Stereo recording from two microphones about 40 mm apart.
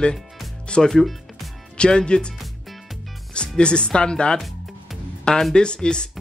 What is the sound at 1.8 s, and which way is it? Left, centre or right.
Speech, left.